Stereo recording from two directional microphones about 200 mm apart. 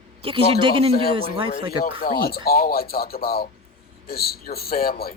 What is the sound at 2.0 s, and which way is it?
A man's voice, 50° left (ahead or behind).